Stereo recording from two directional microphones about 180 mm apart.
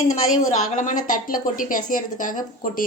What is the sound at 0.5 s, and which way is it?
A woman's voice, 45° left (ahead or behind).